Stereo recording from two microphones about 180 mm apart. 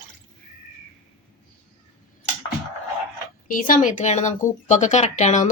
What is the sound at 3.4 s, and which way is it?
Speech, 50° left (ahead or behind).